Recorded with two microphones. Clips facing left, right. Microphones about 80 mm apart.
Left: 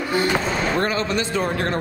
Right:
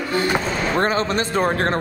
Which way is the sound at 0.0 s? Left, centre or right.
Centre.